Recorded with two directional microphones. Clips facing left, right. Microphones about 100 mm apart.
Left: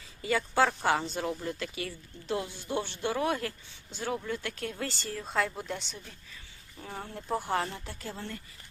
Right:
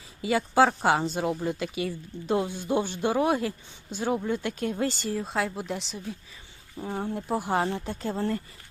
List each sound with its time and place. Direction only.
0.2 s speech: 15° right (ahead or behind)
5.2 s speech: 5° right (ahead or behind)
6.7 s speech: 25° right (ahead or behind)
8.1 s speech: 40° right (ahead or behind)